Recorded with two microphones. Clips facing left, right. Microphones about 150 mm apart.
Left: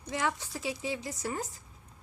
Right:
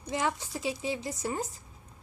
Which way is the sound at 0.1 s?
25° right (ahead or behind).